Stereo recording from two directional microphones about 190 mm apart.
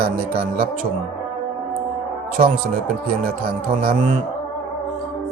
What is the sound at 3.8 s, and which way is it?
Speech, 50° right (ahead or behind).